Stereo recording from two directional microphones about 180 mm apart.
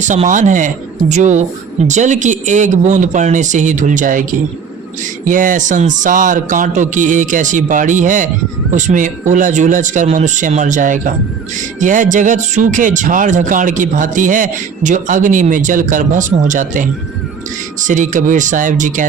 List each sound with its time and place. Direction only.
0.1 s speech: 45° right (ahead or behind)